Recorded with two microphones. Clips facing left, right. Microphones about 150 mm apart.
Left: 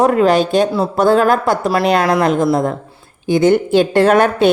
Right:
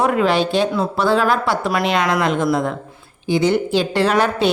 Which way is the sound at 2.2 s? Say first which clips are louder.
Left 4 dB; 45° left (ahead or behind).